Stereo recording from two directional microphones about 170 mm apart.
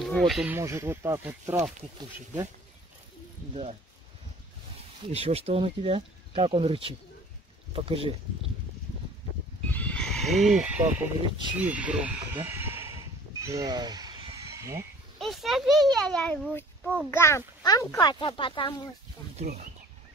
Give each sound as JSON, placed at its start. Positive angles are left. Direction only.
{"t": 0.0, "sound": "speech", "side_deg": 0}
{"t": 0.5, "sound": "speech", "side_deg": -15}
{"t": 5.1, "sound": "speech", "side_deg": -35}
{"t": 9.7, "sound": "neigh", "side_deg": 10}
{"t": 11.5, "sound": "speech", "side_deg": -10}
{"t": 15.1, "sound": "a child's voice", "side_deg": 0}
{"t": 19.3, "sound": "speech", "side_deg": -40}